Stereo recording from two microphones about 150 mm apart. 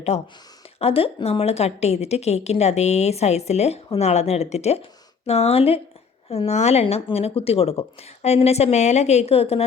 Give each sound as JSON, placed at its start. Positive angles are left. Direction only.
{"t": 0.1, "sound": "speech", "side_deg": 45}